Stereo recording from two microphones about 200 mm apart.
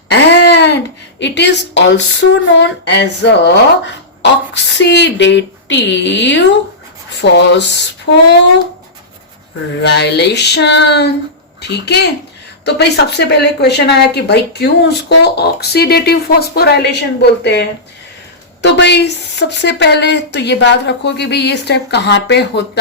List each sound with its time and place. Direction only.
0.1 s a sound: 60° left (ahead or behind)
1.2 s speech: 60° left (ahead or behind)
9.8 s speech: 55° left (ahead or behind)